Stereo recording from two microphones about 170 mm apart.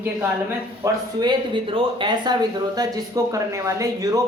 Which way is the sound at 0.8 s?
25° right (ahead or behind).